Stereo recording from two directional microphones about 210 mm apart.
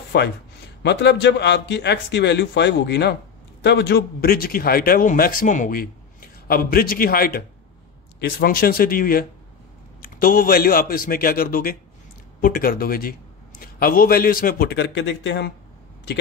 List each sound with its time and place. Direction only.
0.1 s a man's voice: 55° left (ahead or behind)